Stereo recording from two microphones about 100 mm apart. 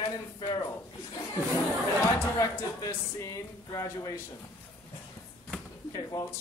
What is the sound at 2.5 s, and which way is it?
Speech, 25° left (ahead or behind).